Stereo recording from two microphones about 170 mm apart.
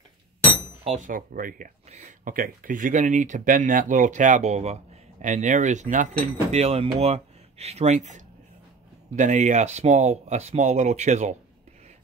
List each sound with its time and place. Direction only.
0.8 s speech: 50° right (ahead or behind)